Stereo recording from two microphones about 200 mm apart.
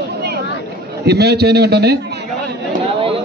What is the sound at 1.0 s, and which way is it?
Speech, 55° right (ahead or behind).